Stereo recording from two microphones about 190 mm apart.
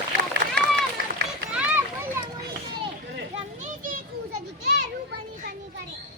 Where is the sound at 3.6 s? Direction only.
45° right (ahead or behind).